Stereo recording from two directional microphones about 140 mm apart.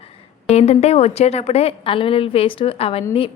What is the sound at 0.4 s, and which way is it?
A woman's voice, 50° left (ahead or behind).